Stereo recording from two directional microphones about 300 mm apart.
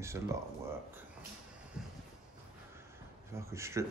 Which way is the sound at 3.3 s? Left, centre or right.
Centre.